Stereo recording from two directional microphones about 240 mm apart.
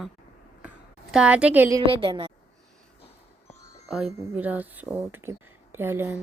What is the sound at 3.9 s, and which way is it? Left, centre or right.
Speech, centre.